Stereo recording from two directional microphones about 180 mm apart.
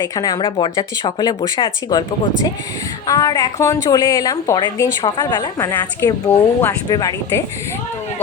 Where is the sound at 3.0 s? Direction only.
20° left (ahead or behind).